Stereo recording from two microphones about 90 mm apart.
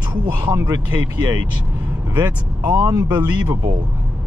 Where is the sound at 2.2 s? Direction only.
25° right (ahead or behind).